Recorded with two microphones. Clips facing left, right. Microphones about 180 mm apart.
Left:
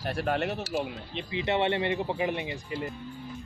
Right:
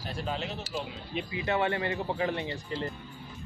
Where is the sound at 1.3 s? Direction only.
25° left (ahead or behind).